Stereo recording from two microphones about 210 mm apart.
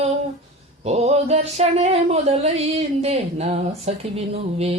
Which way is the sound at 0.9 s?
30° right (ahead or behind).